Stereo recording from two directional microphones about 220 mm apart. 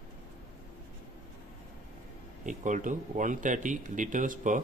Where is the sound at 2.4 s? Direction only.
35° right (ahead or behind).